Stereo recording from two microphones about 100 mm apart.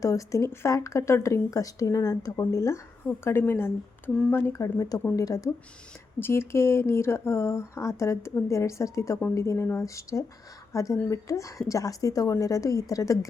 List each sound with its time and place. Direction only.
0.0 s speech: 35° left (ahead or behind)
4.5 s speech: 35° left (ahead or behind)
6.1 s speech: 25° left (ahead or behind)